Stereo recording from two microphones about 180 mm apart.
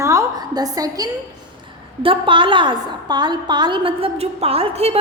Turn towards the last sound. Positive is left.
turn(degrees=-35)  # may be behind; listen again after turning